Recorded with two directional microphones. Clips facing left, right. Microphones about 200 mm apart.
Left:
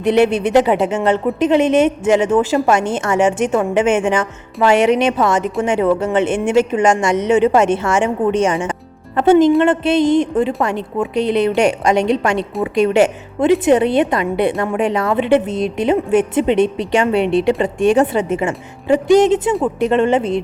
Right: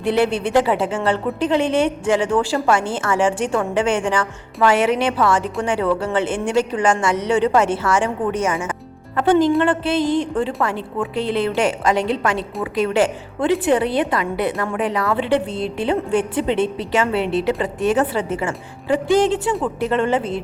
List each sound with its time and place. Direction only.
0.0 s a woman's voice: 20° left (ahead or behind)